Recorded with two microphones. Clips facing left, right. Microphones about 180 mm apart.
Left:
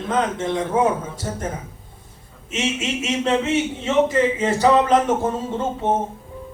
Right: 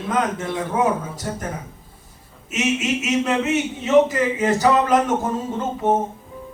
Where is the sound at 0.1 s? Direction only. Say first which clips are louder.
Left 1 dB; 30° left (ahead or behind).